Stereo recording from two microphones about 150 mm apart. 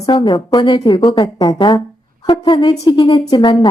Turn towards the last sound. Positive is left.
turn(degrees=30)  # may be behind; listen again after turning